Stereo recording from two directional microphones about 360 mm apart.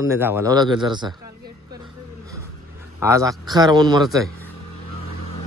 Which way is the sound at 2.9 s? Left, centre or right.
Centre.